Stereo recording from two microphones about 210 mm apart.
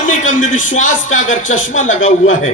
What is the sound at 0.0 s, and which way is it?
Speech, 35° left (ahead or behind).